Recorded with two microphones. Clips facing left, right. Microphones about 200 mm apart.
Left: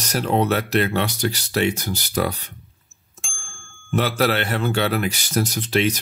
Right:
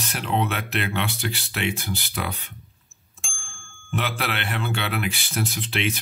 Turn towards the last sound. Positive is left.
turn(degrees=40)  # may be behind; listen again after turning